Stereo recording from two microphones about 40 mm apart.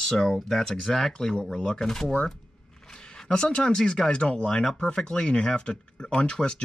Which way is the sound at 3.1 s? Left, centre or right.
Centre.